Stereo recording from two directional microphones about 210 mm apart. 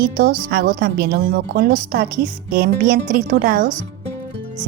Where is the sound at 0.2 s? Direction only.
50° right (ahead or behind).